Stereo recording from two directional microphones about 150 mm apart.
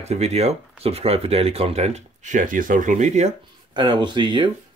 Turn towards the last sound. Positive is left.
turn(degrees=-30)  # may be behind; listen again after turning